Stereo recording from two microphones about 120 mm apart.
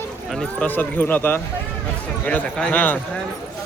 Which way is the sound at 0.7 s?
15° left (ahead or behind).